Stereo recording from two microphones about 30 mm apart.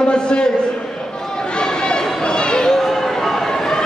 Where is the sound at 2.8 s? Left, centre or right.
Centre.